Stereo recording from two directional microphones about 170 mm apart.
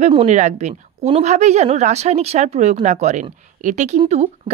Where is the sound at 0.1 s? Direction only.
40° right (ahead or behind).